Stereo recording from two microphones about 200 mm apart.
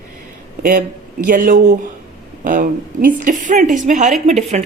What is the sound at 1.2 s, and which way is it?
A woman's voice, 40° right (ahead or behind).